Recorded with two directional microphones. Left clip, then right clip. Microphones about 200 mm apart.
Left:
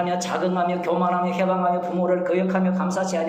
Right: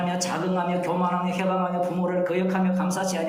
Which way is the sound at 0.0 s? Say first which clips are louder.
Left 4 dB; 30° left (ahead or behind).